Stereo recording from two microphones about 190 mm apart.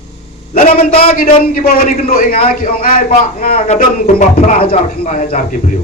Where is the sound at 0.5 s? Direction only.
50° left (ahead or behind).